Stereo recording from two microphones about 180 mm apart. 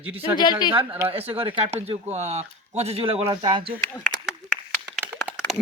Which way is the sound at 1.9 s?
35° right (ahead or behind).